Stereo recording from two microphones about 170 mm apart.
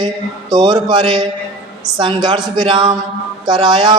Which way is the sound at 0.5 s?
25° right (ahead or behind).